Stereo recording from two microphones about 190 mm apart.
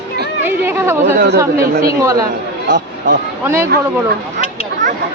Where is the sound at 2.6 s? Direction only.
70° right (ahead or behind).